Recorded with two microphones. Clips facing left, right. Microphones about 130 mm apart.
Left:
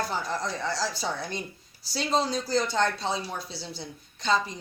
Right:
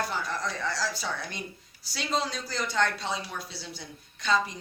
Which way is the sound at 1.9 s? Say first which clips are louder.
Left 4 dB; 35° left (ahead or behind).